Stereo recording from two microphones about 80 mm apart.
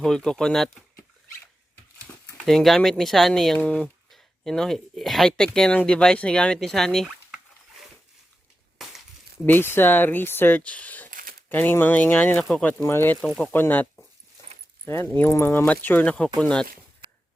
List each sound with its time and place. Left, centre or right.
0.0 s speech: centre
2.4 s speech: centre
8.8 s a sound: centre
9.5 s speech: left
12.8 s speech: left
15.6 s speech: left
16.4 s speech: centre